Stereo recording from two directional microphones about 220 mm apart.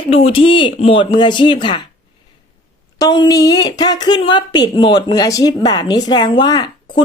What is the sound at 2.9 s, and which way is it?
A woman's voice, 20° left (ahead or behind).